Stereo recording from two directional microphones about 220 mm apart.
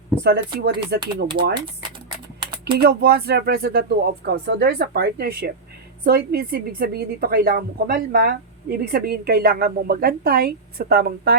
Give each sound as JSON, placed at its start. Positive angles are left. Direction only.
{"t": 0.2, "sound": "a woman's voice", "side_deg": -50}
{"t": 1.4, "sound": "speech", "side_deg": -25}
{"t": 2.7, "sound": "a woman's voice", "side_deg": -45}